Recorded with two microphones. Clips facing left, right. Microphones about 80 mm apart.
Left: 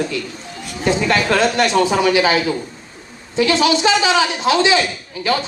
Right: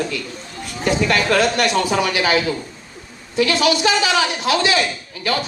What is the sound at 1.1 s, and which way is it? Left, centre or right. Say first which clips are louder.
A man's voice: left 1 dB; left.